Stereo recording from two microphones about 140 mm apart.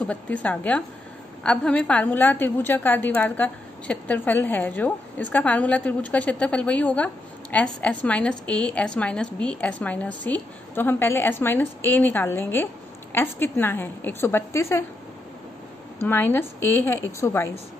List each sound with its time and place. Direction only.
0.0 s a woman's voice: 10° left (ahead or behind)
16.1 s a woman's voice: 15° left (ahead or behind)